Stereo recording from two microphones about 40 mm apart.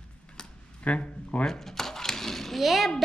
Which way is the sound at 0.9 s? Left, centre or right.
Left.